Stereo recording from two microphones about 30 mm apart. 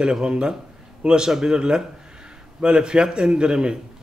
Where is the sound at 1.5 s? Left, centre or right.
Right.